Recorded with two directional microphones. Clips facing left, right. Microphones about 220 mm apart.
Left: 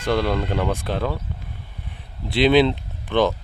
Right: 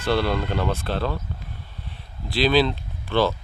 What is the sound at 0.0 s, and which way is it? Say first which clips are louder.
Speech: left 1 dB; 15° left (ahead or behind).